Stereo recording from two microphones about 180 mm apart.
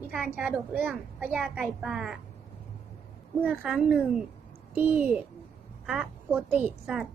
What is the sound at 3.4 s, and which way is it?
A woman's voice, 5° right (ahead or behind).